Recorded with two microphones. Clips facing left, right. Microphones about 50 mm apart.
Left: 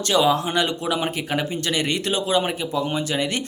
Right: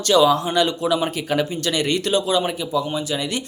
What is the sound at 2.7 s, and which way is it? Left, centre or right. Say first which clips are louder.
Speech: right 1 dB; left.